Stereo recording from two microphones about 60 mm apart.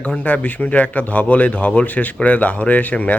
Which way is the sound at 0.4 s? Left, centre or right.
Left.